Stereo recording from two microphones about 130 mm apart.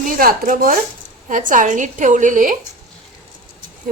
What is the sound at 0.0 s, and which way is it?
A woman's voice, 90° right.